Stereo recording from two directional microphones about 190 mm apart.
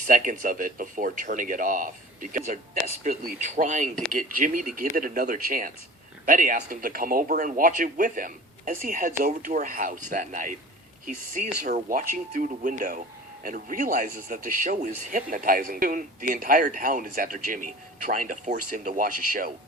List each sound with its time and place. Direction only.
0.1 s speech: 45° right (ahead or behind)